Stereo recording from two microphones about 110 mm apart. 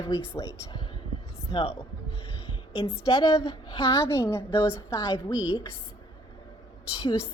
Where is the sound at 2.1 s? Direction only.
55° left (ahead or behind).